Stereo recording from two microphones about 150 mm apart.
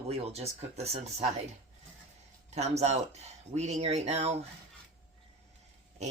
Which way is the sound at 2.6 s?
45° right (ahead or behind).